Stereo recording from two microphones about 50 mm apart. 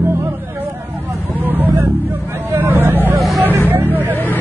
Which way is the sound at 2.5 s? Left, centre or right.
Right.